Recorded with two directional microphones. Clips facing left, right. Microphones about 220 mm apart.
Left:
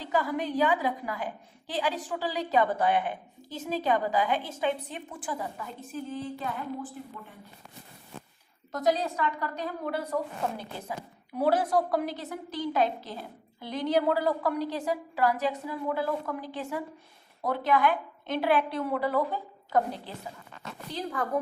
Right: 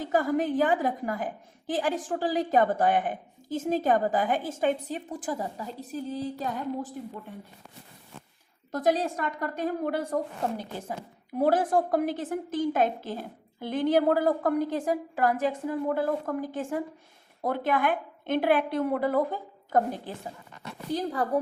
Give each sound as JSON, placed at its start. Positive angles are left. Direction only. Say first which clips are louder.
{"t": 0.0, "sound": "a woman's voice", "louder": "right 4 dB", "side_deg": -45}
{"t": 8.9, "sound": "a woman's voice", "louder": "right 1 dB", "side_deg": -50}
{"t": 20.9, "sound": "speech", "louder": "right 5 dB", "side_deg": -35}